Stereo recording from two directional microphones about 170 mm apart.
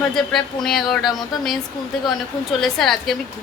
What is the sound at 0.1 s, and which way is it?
A woman's voice, centre (ahead or behind).